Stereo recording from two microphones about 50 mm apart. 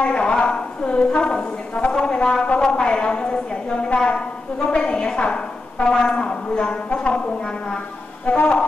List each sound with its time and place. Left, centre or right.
0.0 s a sound: left
4.6 s a woman's voice: left
8.3 s a woman's voice: left